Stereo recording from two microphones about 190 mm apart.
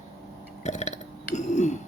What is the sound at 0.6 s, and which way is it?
Burping, 35° left (ahead or behind).